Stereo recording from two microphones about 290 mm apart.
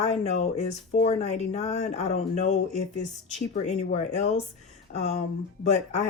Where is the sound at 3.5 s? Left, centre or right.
Left.